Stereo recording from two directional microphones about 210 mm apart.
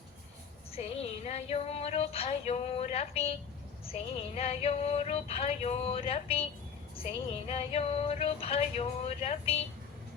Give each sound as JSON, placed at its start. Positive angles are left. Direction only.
{"t": 0.7, "sound": "female singing", "side_deg": 30}
{"t": 4.4, "sound": "female singing", "side_deg": 30}